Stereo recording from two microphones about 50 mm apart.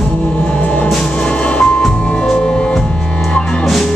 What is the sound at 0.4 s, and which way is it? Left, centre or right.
Music, left.